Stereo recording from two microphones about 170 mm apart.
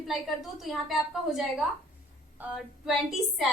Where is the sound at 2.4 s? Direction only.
5° right (ahead or behind).